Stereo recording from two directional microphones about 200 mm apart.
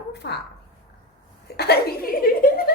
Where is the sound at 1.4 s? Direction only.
55° left (ahead or behind).